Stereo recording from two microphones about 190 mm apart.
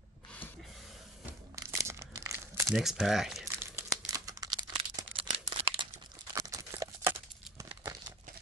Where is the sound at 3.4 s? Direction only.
15° right (ahead or behind).